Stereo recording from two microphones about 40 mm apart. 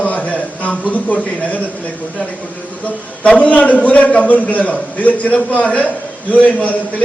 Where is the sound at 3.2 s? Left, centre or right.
Left.